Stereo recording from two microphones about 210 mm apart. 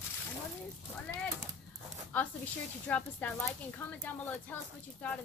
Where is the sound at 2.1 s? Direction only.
10° left (ahead or behind).